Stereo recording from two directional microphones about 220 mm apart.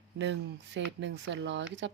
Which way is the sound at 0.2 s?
55° right (ahead or behind).